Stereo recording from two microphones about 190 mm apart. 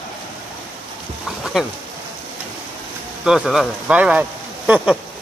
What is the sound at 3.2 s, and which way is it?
Speech, 5° right (ahead or behind).